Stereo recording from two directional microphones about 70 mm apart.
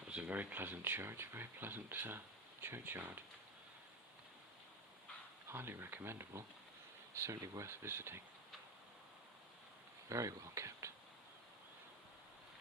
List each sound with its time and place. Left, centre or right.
0.1 s speech: centre
5.5 s speech: right
7.2 s speech: right
7.7 s speech: right
10.1 s speech: right